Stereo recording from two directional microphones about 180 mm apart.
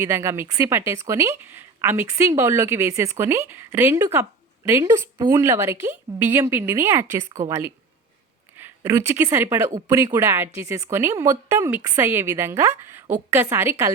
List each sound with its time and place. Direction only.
0.0 s a woman's voice: 15° right (ahead or behind)